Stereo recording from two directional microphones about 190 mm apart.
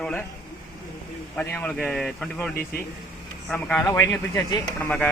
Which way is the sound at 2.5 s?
55° left (ahead or behind).